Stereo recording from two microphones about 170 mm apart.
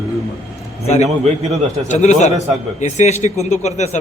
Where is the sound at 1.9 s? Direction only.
45° left (ahead or behind).